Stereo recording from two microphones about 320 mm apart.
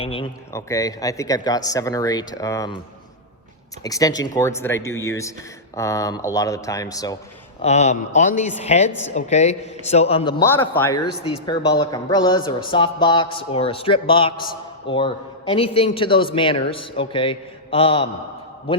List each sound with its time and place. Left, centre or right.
0.0 s a man's voice: centre
3.8 s a man's voice: centre